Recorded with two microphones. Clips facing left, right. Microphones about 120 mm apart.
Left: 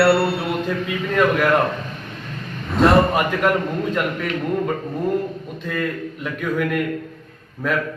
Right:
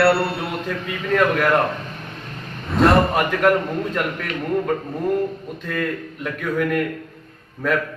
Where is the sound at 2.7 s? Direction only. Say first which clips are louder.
Left 1 dB; centre (ahead or behind).